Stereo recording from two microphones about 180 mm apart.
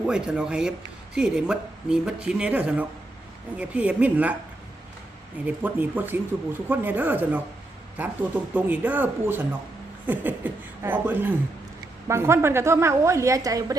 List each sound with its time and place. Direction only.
0.0 s speech: 5° right (ahead or behind)
5.5 s speech: 10° right (ahead or behind)